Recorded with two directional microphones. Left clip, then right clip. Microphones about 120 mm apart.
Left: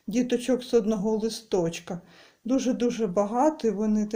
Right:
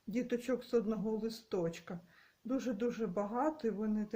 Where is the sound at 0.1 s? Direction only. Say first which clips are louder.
Left 11 dB; 25° left (ahead or behind).